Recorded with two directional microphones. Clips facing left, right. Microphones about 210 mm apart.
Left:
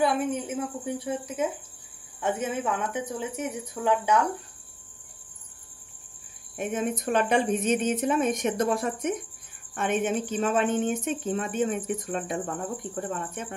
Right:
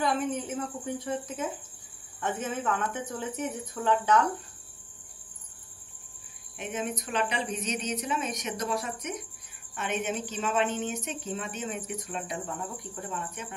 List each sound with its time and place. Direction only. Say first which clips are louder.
0.0 s speech: left 3 dB; 10° left (ahead or behind)
6.5 s a woman's voice: left 5 dB; 50° left (ahead or behind)